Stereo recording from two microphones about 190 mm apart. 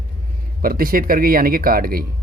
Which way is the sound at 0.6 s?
50° right (ahead or behind).